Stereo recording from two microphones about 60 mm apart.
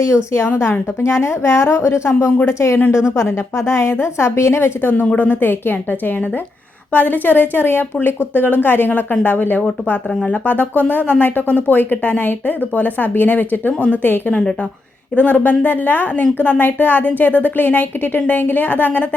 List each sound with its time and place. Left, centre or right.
0.3 s a woman's voice: left
1.0 s a woman's voice: left